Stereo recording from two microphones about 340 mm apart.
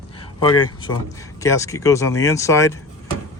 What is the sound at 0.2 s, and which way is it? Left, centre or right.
Speech, centre.